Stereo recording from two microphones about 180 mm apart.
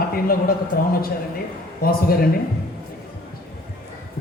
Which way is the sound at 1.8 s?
55° left (ahead or behind).